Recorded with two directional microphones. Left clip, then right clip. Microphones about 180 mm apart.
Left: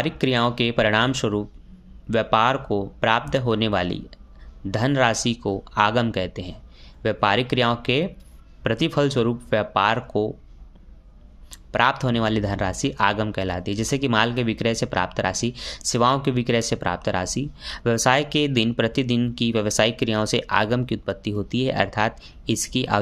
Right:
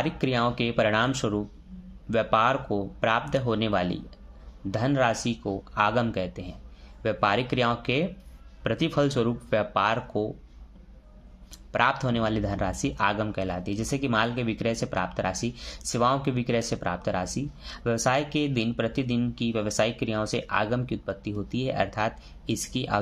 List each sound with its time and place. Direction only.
0.0 s speech: 30° left (ahead or behind)
11.5 s speech: 25° left (ahead or behind)